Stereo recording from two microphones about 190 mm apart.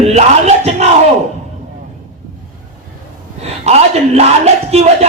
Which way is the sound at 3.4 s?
35° right (ahead or behind).